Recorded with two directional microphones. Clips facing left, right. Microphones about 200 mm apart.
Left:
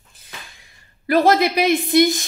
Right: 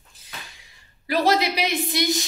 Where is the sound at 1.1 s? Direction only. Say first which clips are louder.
Left 5 dB; 50° left (ahead or behind).